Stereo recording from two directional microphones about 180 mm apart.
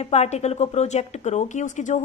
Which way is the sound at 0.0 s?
40° left (ahead or behind).